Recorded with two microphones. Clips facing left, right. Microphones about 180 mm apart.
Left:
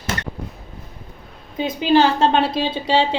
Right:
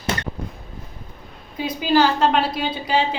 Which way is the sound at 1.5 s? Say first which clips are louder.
Left 2 dB; 25° left (ahead or behind).